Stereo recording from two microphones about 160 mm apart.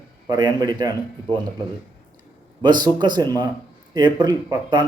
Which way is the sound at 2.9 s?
30° right (ahead or behind).